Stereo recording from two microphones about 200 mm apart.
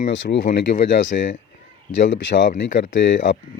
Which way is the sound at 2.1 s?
65° left (ahead or behind).